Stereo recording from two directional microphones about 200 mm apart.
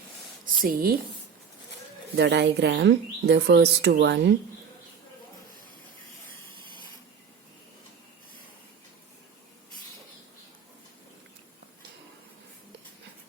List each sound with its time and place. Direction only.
0.4 s a woman's voice: 45° right (ahead or behind)
2.1 s speech: 60° right (ahead or behind)